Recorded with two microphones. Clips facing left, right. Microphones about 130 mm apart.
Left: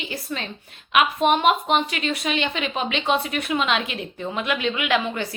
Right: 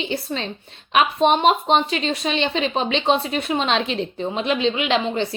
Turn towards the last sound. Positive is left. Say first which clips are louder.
# right 2 dB
turn(degrees=-25)  # may be behind; listen again after turning